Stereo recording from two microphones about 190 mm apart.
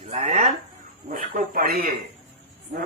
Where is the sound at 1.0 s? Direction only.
45° right (ahead or behind).